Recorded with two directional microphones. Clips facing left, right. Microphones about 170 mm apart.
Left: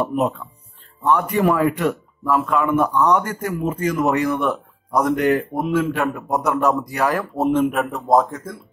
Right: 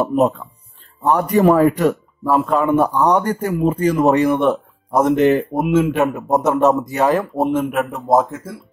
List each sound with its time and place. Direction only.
0.0 s a man's voice: 40° right (ahead or behind); by 7.4 s 25° right (ahead or behind)
7.4 s a man's voice: centre (ahead or behind)